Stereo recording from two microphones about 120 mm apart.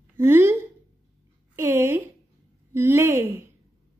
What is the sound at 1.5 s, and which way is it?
Speech, 20° right (ahead or behind).